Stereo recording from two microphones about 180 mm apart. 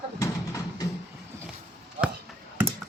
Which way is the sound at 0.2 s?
20° left (ahead or behind).